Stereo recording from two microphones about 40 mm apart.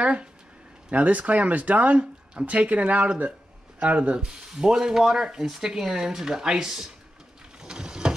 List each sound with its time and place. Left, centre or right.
0.0 s speech: right
4.2 s speech: centre
7.6 s vehicle: centre